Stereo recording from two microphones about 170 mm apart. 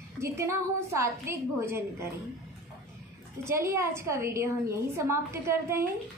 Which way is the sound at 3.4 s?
15° right (ahead or behind).